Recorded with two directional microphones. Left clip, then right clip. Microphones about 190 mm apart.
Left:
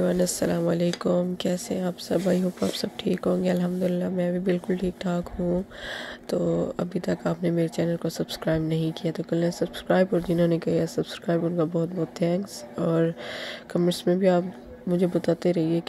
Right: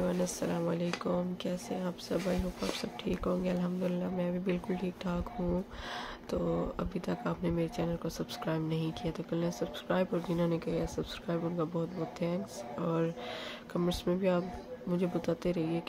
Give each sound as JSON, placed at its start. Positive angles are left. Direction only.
{"t": 0.0, "sound": "speech", "side_deg": 30}
{"t": 6.3, "sound": "speech", "side_deg": 25}